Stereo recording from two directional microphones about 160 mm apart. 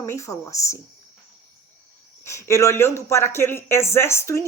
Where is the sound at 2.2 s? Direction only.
15° left (ahead or behind).